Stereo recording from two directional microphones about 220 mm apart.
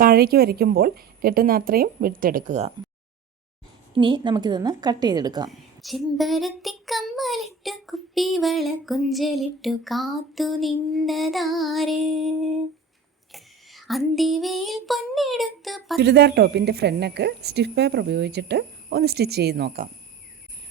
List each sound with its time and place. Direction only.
0.0 s a woman's voice: 45° right (ahead or behind)
3.9 s a woman's voice: 20° right (ahead or behind)
5.5 s a child's voice: centre (ahead or behind)
13.3 s a sound: centre (ahead or behind)
16.0 s a woman's voice: 50° right (ahead or behind)